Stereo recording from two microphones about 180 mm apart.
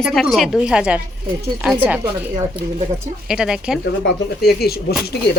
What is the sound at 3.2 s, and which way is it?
Speech, 5° right (ahead or behind).